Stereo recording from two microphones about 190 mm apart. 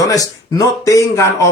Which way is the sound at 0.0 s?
20° left (ahead or behind).